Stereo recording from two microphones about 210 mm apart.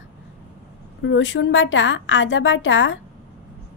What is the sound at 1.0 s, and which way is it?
A woman's voice, 60° left (ahead or behind).